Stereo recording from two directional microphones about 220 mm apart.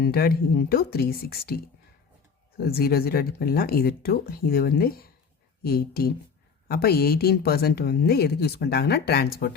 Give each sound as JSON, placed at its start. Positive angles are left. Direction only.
{"t": 0.0, "sound": "speech", "side_deg": 45}
{"t": 2.6, "sound": "speech", "side_deg": 45}